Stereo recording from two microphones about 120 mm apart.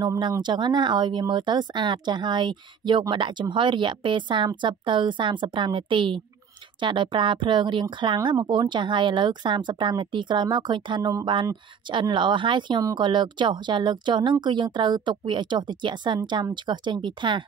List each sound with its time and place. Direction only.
0.0 s a woman's voice: 35° right (ahead or behind)